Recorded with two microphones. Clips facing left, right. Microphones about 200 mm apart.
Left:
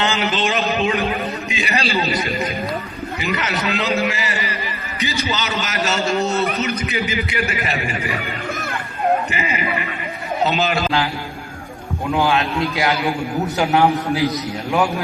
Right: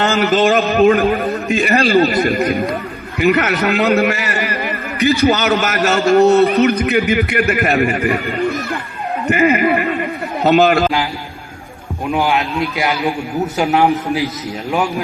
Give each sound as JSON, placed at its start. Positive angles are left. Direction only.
{"t": 0.0, "sound": "a man's voice", "side_deg": -45}
{"t": 9.2, "sound": "a man's voice", "side_deg": -55}
{"t": 12.1, "sound": "a man's voice", "side_deg": -15}